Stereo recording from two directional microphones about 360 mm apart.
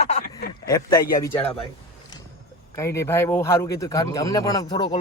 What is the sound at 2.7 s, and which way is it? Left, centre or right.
Speech, centre.